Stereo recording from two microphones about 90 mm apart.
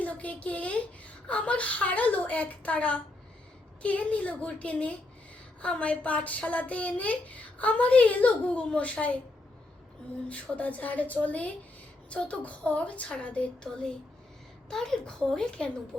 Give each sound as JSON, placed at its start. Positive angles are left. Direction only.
{"t": 0.0, "sound": "a woman's voice", "side_deg": 15}
{"t": 10.2, "sound": "speech", "side_deg": 15}